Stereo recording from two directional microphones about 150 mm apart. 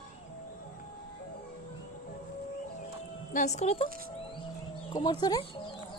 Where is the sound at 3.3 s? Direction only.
50° left (ahead or behind).